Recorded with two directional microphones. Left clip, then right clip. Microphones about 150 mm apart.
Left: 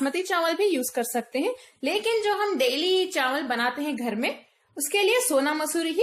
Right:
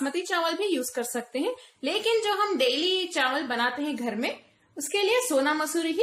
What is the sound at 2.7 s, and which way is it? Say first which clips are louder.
A woman's voice: left 2 dB; 30° left (ahead or behind).